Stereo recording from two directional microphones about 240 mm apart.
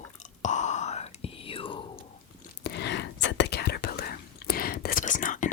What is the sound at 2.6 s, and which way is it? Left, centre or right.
Whispering, left.